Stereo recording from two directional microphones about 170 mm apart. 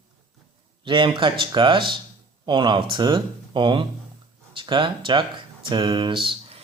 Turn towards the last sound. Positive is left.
turn(degrees=-30)  # may be behind; listen again after turning